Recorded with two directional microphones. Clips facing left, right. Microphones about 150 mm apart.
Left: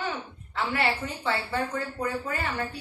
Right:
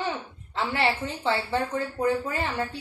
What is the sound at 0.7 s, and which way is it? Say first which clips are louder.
Speech: right 3 dB; 25° right (ahead or behind).